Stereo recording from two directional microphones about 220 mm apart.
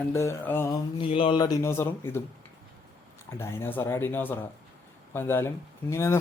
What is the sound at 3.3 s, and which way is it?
Speech, 10° left (ahead or behind).